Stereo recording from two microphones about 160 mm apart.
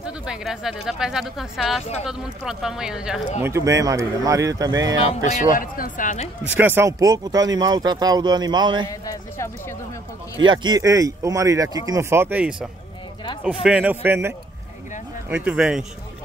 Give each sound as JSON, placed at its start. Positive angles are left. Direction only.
{"t": 0.0, "sound": "speech", "side_deg": -5}
{"t": 3.4, "sound": "speech", "side_deg": -20}
{"t": 5.0, "sound": "speech", "side_deg": 45}
{"t": 6.4, "sound": "speech", "side_deg": -10}
{"t": 8.8, "sound": "a man's voice", "side_deg": 20}
{"t": 10.4, "sound": "a man's voice", "side_deg": -30}